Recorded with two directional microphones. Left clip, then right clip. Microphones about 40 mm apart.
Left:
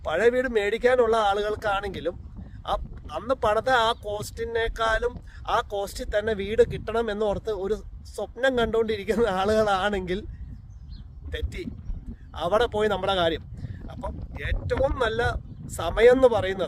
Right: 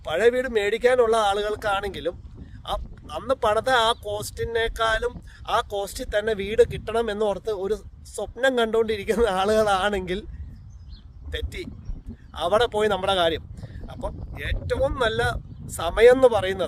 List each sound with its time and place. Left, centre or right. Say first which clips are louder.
0.0 s speech: right 1 dB; right
11.3 s speech: right 2 dB; right